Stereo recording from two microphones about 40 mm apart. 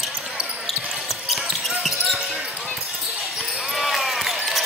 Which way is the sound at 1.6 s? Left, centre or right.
Centre.